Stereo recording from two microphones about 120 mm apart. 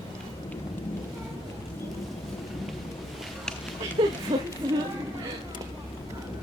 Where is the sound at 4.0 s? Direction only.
45° right (ahead or behind).